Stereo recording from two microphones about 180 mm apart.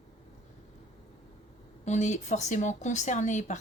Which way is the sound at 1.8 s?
40° left (ahead or behind).